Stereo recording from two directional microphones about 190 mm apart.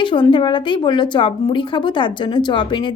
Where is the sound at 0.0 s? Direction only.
25° left (ahead or behind).